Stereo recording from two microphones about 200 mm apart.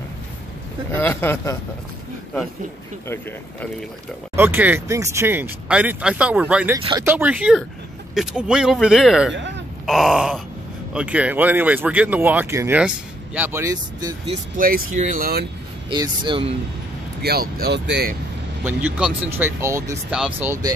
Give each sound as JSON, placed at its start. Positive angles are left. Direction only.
{"t": 0.9, "sound": "speech", "side_deg": 10}
{"t": 4.4, "sound": "speech", "side_deg": -10}
{"t": 6.8, "sound": "speech", "side_deg": -20}
{"t": 7.1, "sound": "speech", "side_deg": -10}
{"t": 14.6, "sound": "speech", "side_deg": -45}
{"t": 15.9, "sound": "speech", "side_deg": -25}
{"t": 17.2, "sound": "speech", "side_deg": -50}
{"t": 18.6, "sound": "speech", "side_deg": -10}